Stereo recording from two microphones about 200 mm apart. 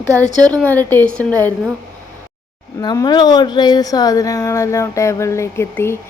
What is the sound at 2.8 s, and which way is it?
Speech, 20° left (ahead or behind).